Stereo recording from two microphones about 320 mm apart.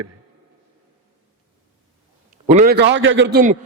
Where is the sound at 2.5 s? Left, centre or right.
Right.